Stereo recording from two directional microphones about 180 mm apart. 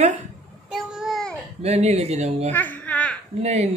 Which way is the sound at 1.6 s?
35° right (ahead or behind).